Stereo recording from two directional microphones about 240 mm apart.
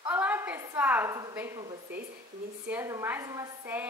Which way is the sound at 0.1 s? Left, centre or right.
Centre.